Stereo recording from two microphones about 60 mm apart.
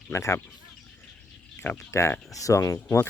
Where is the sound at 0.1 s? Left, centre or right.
Left.